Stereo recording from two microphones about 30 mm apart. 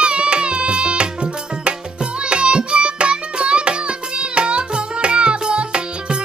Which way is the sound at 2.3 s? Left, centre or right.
Right.